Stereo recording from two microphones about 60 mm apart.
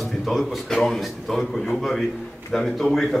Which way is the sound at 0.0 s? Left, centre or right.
Centre.